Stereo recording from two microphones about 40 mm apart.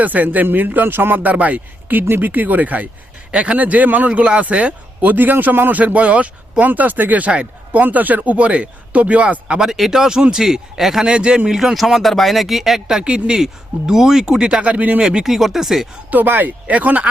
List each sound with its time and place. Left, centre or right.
0.0 s speech: right
2.3 s speech: right
3.3 s speech: right
5.1 s speech: right
5.7 s speech: right
9.6 s speech: centre
11.0 s speech: right
11.5 s speech: centre
13.0 s speech: right
13.4 s speech: centre
14.6 s speech: right
15.2 s speech: centre
16.0 s speech: right
16.7 s speech: right